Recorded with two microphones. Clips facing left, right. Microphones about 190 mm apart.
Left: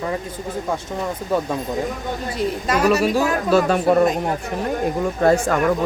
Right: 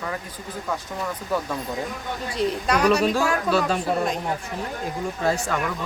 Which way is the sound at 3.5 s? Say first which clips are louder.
Left 11 dB; 60° left (ahead or behind).